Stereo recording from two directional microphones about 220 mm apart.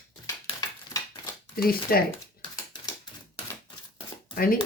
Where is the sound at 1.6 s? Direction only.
40° left (ahead or behind).